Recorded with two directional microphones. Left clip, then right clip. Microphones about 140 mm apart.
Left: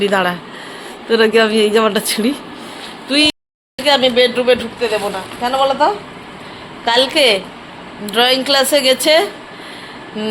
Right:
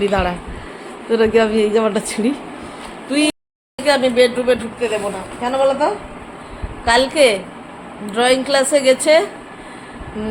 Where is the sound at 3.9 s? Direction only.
15° left (ahead or behind).